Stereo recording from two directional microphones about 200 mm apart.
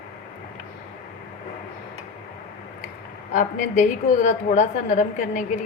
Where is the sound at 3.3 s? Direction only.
40° left (ahead or behind).